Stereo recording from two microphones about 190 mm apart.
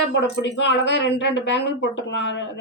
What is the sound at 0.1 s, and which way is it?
Speech, 65° left (ahead or behind).